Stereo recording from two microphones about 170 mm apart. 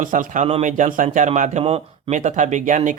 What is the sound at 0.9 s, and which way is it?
Speech, 50° right (ahead or behind).